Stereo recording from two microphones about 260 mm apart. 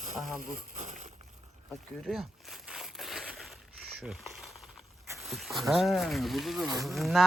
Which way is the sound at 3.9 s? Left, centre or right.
Centre.